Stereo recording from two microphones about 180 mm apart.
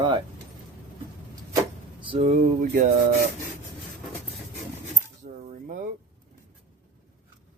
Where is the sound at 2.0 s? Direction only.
35° right (ahead or behind).